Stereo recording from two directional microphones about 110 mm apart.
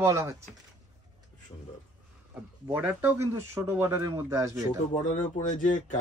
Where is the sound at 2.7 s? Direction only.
15° right (ahead or behind).